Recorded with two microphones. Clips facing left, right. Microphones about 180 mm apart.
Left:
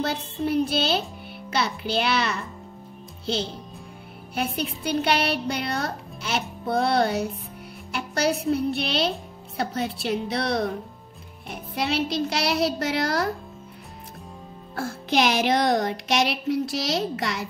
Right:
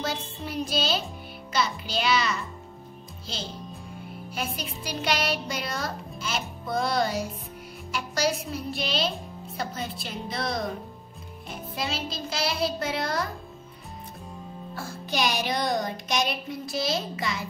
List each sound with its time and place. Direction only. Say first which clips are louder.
0.0 s speech: left 6 dB; 60° left (ahead or behind)
4.4 s speech: left 6 dB; 60° left (ahead or behind)
15.3 s speech: left 6 dB; 85° left; by 17.5 s 70° left (ahead or behind)